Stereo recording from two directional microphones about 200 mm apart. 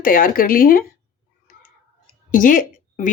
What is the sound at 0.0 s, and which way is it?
Speech, 45° left (ahead or behind).